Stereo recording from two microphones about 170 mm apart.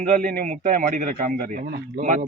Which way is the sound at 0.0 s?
55° right (ahead or behind).